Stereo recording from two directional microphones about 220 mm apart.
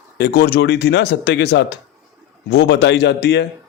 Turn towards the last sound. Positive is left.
turn(degrees=50)  # may be behind; listen again after turning